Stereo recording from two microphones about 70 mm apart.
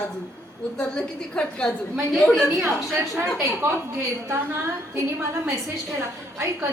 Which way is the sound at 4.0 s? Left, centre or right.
Right.